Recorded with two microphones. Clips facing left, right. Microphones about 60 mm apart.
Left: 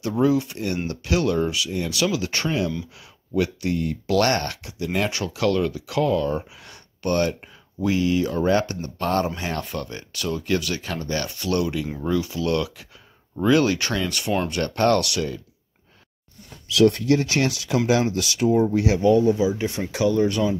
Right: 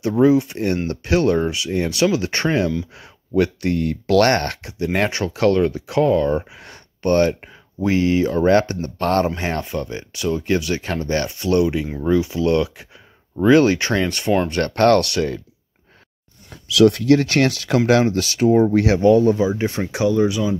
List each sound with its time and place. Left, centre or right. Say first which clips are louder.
0.2 s speech: right 5 dB; right
3.3 s speech: right 5 dB; right
11.2 s speech: right 7 dB; right
14.5 s speech: right 5 dB; right
16.6 s speech: right 4 dB; right
18.0 s speech: right 4 dB; right
19.6 s speech: right 4 dB; right
19.9 s speech: right 2 dB; centre